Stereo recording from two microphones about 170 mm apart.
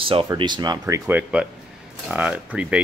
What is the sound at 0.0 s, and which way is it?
Speech, 35° right (ahead or behind).